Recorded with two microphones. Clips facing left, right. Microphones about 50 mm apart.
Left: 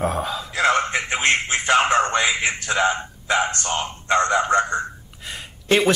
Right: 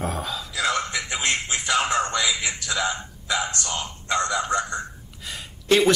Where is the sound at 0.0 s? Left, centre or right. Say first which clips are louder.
Left 5 dB; left.